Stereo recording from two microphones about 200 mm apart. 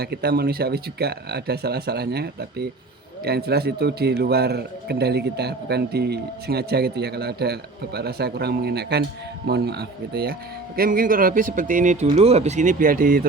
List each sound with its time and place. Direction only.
0.0 s a man's voice: 50° right (ahead or behind)